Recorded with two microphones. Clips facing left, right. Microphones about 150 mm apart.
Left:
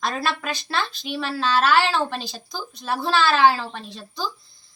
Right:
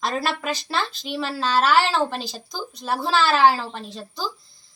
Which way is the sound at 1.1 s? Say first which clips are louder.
Even; 5° right (ahead or behind).